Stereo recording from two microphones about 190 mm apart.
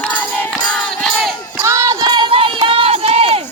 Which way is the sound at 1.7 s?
15° right (ahead or behind).